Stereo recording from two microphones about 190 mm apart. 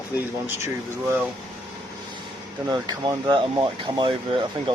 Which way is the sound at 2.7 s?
20° right (ahead or behind).